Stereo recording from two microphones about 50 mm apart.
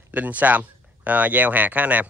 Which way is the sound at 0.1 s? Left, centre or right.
Right.